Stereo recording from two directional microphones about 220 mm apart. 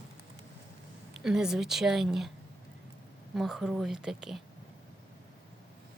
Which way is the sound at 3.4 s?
Centre (ahead or behind).